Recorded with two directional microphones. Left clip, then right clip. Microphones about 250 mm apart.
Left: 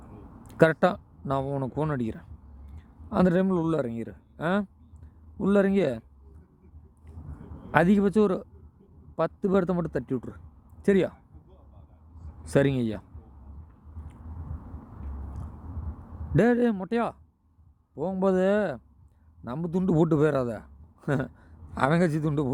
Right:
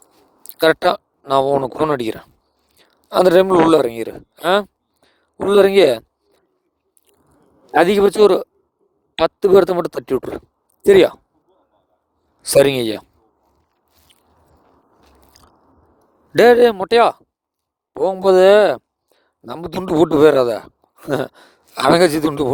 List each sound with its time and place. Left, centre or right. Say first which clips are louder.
0.5 s a man's voice: right 8 dB; right
7.7 s a man's voice: right 10 dB; right
12.4 s a man's voice: right 12 dB; right
16.3 s a man's voice: right 14 dB; right